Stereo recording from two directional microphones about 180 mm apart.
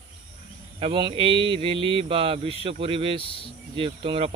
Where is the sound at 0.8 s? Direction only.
30° right (ahead or behind).